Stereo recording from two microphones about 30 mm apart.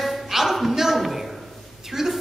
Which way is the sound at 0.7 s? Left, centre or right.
Centre.